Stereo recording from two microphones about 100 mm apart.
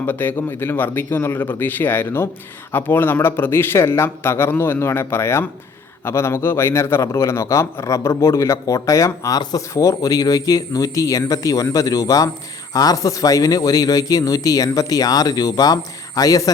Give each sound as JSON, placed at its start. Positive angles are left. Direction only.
{"t": 0.0, "sound": "a man's voice", "side_deg": 20}